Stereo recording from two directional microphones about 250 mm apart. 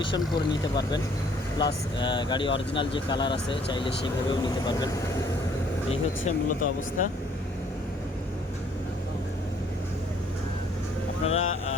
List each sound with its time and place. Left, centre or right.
0.0 s speech: centre
5.9 s speech: left
11.3 s speech: left